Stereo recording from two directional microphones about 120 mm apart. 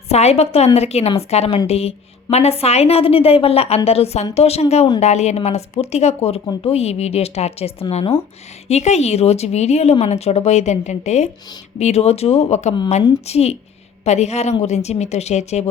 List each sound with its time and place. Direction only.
0.1 s a woman's voice: 60° left (ahead or behind)